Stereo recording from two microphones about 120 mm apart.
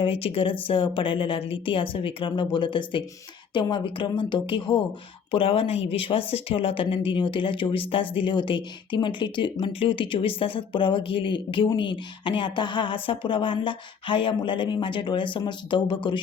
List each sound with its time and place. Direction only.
0.0 s a woman's voice: 50° left (ahead or behind)